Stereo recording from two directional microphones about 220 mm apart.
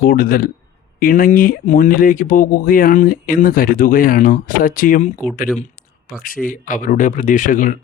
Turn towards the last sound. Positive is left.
turn(degrees=35)  # may be behind; listen again after turning